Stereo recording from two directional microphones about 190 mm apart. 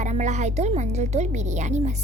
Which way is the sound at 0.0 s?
40° right (ahead or behind).